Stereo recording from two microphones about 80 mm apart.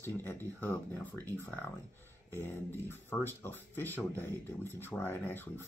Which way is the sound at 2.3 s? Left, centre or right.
Left.